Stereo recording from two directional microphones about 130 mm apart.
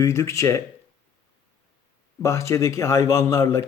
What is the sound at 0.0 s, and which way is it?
Speech, 20° left (ahead or behind).